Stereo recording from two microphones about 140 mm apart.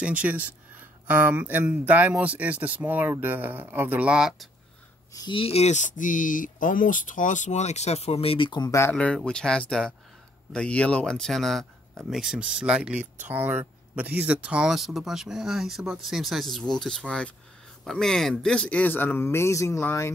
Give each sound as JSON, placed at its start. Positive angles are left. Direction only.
{"t": 0.0, "sound": "speech", "side_deg": -10}
{"t": 5.1, "sound": "speech", "side_deg": 35}
{"t": 8.9, "sound": "speech", "side_deg": 5}